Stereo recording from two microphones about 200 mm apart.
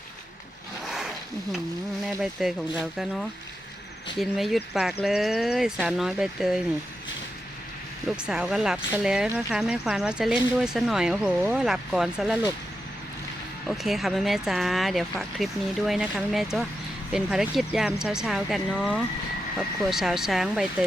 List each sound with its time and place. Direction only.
2.0 s speech: centre (ahead or behind)
8.1 s speech: 5° right (ahead or behind)
13.7 s speech: centre (ahead or behind)